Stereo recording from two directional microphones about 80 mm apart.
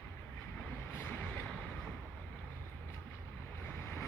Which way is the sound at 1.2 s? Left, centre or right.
Centre.